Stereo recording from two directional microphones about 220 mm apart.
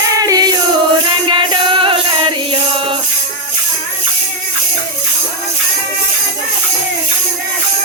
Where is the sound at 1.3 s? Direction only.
25° right (ahead or behind).